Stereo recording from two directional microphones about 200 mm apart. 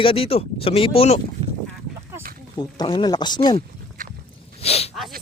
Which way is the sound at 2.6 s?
20° left (ahead or behind).